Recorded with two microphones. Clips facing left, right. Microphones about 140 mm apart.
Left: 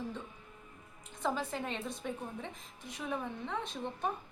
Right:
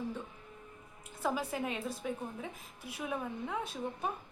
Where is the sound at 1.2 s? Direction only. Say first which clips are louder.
Right 1 dB; 10° right (ahead or behind).